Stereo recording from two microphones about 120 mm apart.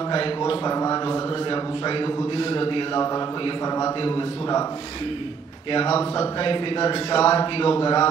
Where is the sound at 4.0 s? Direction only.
45° left (ahead or behind).